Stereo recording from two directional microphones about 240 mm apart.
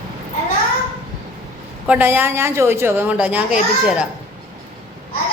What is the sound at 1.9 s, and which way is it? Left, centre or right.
A woman's voice, centre.